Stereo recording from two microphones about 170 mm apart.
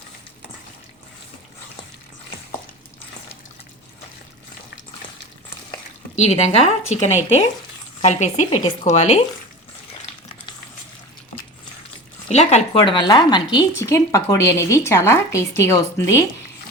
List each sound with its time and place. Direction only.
6.1 s speech: 40° left (ahead or behind)
8.4 s speech: 30° left (ahead or behind)
8.8 s speech: 40° left (ahead or behind)
12.3 s a woman's voice: 40° left (ahead or behind); by 16.2 s 15° left (ahead or behind)